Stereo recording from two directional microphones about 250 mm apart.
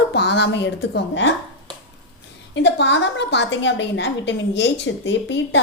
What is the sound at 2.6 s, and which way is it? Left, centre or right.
A woman's voice, left.